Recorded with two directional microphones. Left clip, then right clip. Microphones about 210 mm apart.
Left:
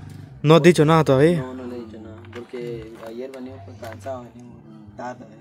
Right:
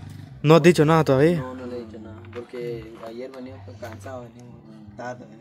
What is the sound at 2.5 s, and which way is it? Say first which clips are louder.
Speech: left 1 dB; centre (ahead or behind).